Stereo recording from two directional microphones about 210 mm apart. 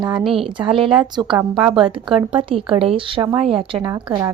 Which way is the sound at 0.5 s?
25° right (ahead or behind).